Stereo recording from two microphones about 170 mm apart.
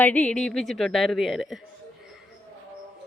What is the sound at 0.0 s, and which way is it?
A woman's voice, 10° left (ahead or behind).